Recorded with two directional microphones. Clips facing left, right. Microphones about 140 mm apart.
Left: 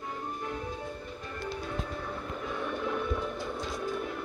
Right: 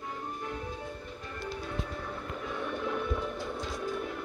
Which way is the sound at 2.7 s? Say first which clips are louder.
Left 1 dB; 10° left (ahead or behind).